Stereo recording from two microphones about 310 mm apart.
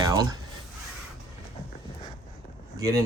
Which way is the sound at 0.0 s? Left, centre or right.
Centre.